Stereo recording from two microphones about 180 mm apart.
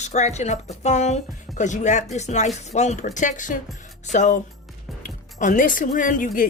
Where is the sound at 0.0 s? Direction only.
40° left (ahead or behind).